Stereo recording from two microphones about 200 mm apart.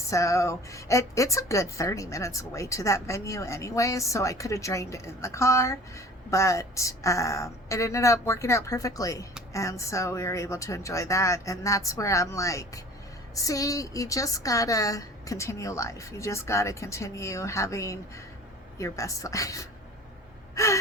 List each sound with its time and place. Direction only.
0.1 s a woman's voice: 15° left (ahead or behind)